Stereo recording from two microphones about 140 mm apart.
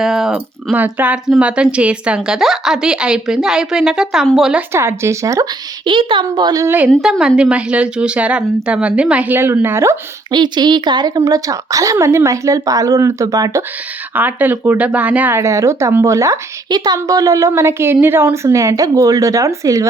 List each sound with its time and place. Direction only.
0.0 s a woman's voice: 5° right (ahead or behind)
4.7 s speech: 20° right (ahead or behind)
5.9 s a woman's voice: 35° right (ahead or behind); by 6.9 s 15° right (ahead or behind)
7.0 s a woman's voice: 5° right (ahead or behind)
10.3 s a woman's voice: 30° right (ahead or behind)
14.2 s speech: 15° right (ahead or behind)